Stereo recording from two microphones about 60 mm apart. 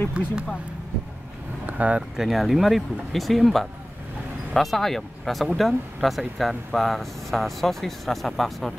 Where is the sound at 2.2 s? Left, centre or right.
Centre.